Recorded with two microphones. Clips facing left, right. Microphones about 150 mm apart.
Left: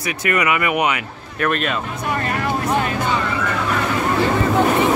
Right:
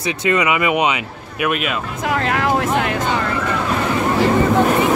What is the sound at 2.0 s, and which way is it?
Vehicle, 85° right.